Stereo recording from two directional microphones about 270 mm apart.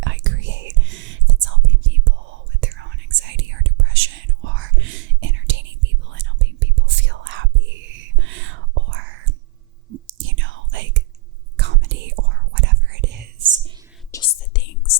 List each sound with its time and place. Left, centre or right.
0.0 s whispering: right
14.3 s whispering: left